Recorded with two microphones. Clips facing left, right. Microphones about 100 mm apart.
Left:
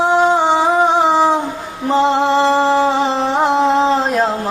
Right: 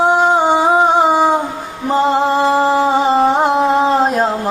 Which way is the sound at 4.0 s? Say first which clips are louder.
Right 2 dB; 45° right (ahead or behind).